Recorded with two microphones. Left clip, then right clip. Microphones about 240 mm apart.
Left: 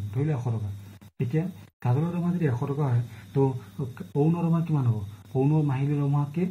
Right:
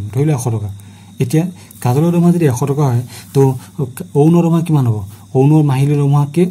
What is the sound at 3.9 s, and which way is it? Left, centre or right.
A man's voice, right.